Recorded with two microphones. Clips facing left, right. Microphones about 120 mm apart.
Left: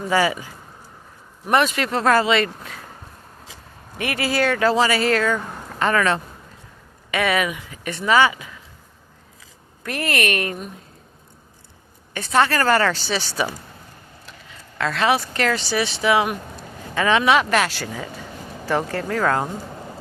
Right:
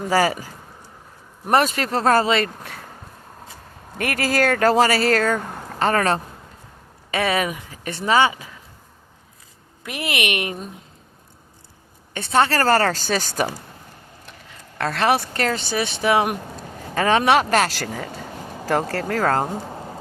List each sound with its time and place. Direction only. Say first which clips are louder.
0.1 s speech: right 1 dB; 40° right (ahead or behind)
3.9 s speech: right 1 dB; 45° right (ahead or behind)
9.8 s a woman's voice: left 2 dB; 15° right (ahead or behind)
12.1 s speech: even; 30° right (ahead or behind); by 13.5 s 45° right (ahead or behind)
15.0 s speech: even; 55° right (ahead or behind)